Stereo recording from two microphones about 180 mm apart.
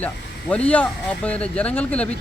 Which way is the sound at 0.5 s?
5° left (ahead or behind).